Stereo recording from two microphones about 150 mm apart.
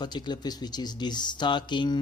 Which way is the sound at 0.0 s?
30° left (ahead or behind).